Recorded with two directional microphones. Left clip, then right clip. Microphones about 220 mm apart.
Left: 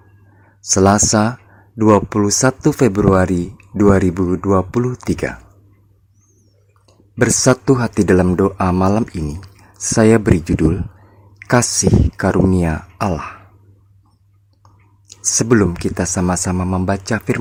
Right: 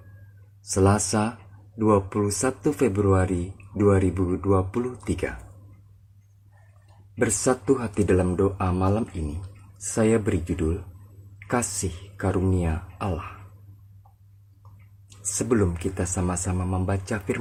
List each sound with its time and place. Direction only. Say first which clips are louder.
0.7 s speech: left 10 dB; 40° left (ahead or behind)
7.2 s speech: left 9 dB; 40° left (ahead or behind)
15.4 s speech: left 9 dB; 40° left (ahead or behind)